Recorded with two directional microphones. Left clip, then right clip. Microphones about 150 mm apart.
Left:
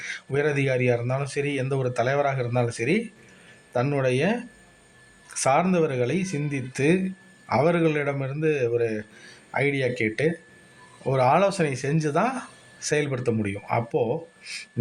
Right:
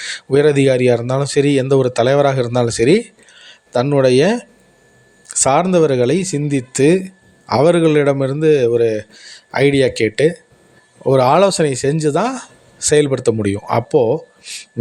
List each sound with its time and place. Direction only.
0.3 s speech: 50° right (ahead or behind)
5.4 s speech: 45° right (ahead or behind)
11.0 s speech: 50° right (ahead or behind)